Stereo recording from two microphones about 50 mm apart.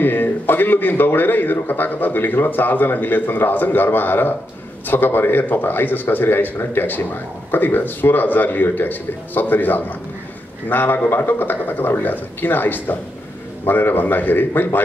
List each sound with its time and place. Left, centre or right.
0.0 s a man's voice: left